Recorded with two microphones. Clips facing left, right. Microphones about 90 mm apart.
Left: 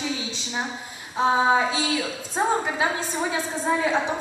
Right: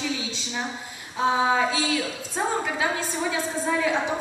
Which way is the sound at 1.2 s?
25° left (ahead or behind).